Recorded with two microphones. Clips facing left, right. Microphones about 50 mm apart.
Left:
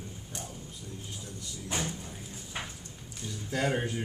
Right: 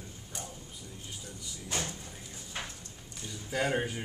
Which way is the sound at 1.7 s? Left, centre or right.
Centre.